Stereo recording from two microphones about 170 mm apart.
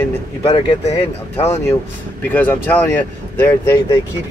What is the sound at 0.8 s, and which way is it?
Speech, 40° left (ahead or behind).